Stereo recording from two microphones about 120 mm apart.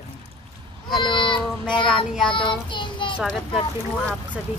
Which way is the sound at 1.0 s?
40° left (ahead or behind).